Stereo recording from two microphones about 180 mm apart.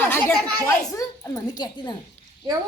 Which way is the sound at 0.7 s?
20° left (ahead or behind).